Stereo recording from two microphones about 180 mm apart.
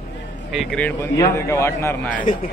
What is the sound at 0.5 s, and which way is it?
A man's voice, 5° left (ahead or behind).